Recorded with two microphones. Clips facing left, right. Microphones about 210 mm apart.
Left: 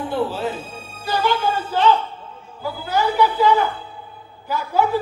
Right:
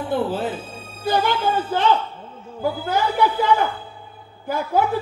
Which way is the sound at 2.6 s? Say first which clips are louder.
Even; 50° right (ahead or behind).